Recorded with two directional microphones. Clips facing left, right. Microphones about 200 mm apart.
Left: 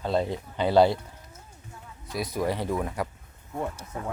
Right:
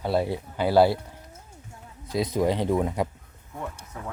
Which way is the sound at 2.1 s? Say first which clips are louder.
Right 4 dB; 20° right (ahead or behind).